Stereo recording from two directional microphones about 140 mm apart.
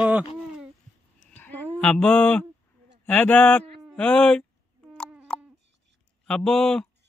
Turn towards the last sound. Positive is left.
turn(degrees=5)  # may be behind; listen again after turning